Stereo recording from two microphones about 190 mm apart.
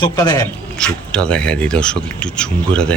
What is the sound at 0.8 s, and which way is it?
Speech, 5° left (ahead or behind).